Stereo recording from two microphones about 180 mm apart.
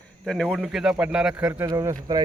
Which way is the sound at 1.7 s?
20° right (ahead or behind).